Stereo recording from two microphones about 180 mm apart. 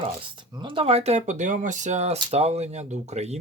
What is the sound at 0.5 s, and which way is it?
Speech, 25° right (ahead or behind).